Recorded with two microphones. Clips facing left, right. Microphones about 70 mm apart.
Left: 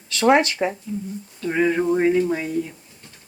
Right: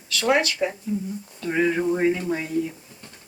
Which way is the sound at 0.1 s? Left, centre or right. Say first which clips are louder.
Left 5 dB; left.